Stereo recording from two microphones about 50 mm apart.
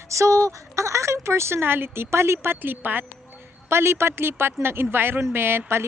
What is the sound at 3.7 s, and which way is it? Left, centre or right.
Speech, right.